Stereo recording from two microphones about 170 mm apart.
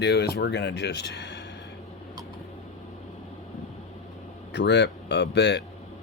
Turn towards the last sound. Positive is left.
turn(degrees=90)